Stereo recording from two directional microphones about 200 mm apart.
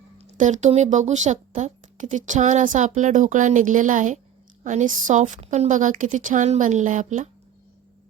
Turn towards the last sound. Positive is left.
turn(degrees=-40)  # may be behind; listen again after turning